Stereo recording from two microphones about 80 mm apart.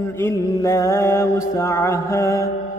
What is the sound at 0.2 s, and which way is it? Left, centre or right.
Mantra, left.